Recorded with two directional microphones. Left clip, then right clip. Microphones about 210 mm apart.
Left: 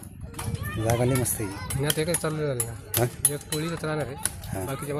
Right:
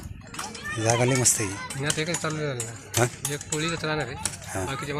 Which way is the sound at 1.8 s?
60° left (ahead or behind).